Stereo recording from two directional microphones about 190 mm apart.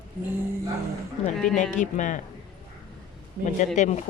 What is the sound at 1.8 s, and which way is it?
Speech, 40° left (ahead or behind).